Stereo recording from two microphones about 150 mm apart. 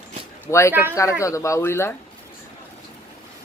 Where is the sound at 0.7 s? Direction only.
15° right (ahead or behind).